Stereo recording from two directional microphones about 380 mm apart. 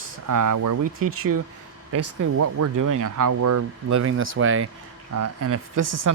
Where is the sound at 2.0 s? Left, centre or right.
Right.